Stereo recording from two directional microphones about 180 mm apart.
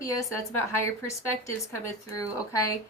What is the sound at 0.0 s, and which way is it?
A woman's voice, 20° left (ahead or behind).